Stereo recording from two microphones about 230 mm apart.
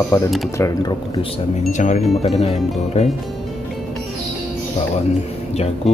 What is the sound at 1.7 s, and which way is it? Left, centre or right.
Speech, left.